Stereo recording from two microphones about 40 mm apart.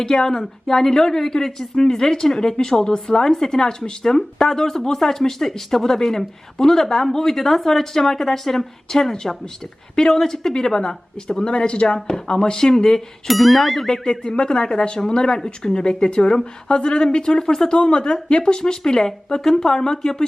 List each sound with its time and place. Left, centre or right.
0.0 s speech: centre
13.2 s speech: centre
13.9 s speech: centre